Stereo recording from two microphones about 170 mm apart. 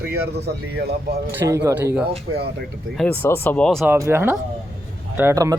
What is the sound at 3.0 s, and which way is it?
Speech, 10° left (ahead or behind).